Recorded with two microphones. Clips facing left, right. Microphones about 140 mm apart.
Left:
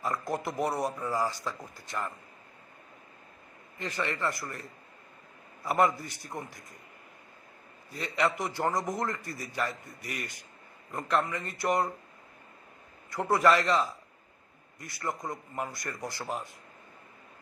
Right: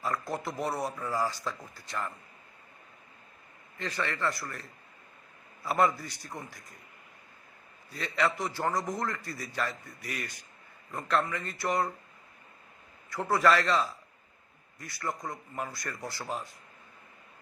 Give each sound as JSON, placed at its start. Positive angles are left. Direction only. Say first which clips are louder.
{"t": 0.0, "sound": "a man's voice", "louder": "left 1 dB", "side_deg": 20}
{"t": 3.8, "sound": "speech", "louder": "even", "side_deg": 15}
{"t": 5.6, "sound": "speech", "louder": "left 1 dB", "side_deg": 15}
{"t": 7.9, "sound": "a man's voice", "louder": "left 1 dB", "side_deg": 15}
{"t": 13.1, "sound": "speech", "louder": "left 1 dB", "side_deg": 20}
{"t": 14.8, "sound": "a man's voice", "louder": "left 1 dB", "side_deg": 20}